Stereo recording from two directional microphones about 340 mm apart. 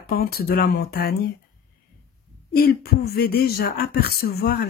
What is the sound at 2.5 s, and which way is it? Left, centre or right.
Speech, left.